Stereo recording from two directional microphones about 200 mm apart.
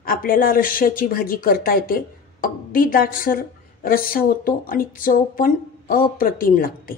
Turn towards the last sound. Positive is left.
turn(degrees=45)  # may be behind; listen again after turning